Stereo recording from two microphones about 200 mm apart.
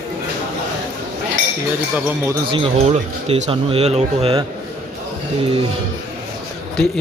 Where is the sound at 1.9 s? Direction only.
10° right (ahead or behind).